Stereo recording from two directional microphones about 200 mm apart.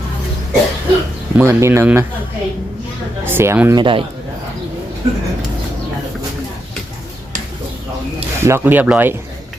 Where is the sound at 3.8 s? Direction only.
25° right (ahead or behind).